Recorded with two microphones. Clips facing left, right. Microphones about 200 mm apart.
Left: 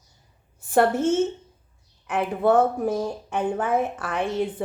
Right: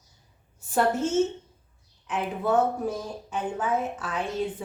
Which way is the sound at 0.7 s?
55° left (ahead or behind).